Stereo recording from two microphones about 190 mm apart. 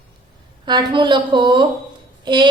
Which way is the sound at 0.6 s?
25° right (ahead or behind).